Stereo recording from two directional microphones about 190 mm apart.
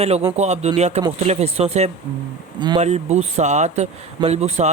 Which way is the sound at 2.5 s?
25° right (ahead or behind).